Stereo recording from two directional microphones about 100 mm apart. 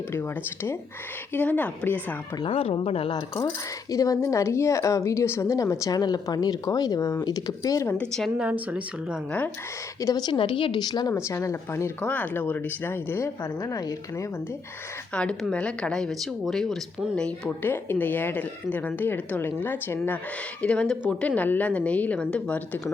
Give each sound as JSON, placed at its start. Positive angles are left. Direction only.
{"t": 0.1, "sound": "a woman's voice", "side_deg": 25}
{"t": 2.4, "sound": "speech", "side_deg": 65}
{"t": 3.9, "sound": "speech", "side_deg": 35}
{"t": 5.9, "sound": "speech", "side_deg": 40}
{"t": 7.9, "sound": "a woman's voice", "side_deg": 10}
{"t": 8.4, "sound": "speech", "side_deg": -10}
{"t": 10.0, "sound": "speech", "side_deg": 35}
{"t": 10.2, "sound": "a woman's voice", "side_deg": 55}
{"t": 11.1, "sound": "speech", "side_deg": 30}
{"t": 11.9, "sound": "speech", "side_deg": 15}
{"t": 15.1, "sound": "a woman's voice", "side_deg": 10}
{"t": 17.6, "sound": "speech", "side_deg": 20}
{"t": 20.6, "sound": "a woman's voice", "side_deg": 10}